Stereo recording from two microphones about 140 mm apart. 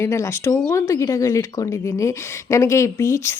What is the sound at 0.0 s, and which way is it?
Speech, 20° left (ahead or behind).